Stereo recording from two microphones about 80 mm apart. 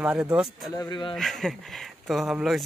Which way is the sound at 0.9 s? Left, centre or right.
Left.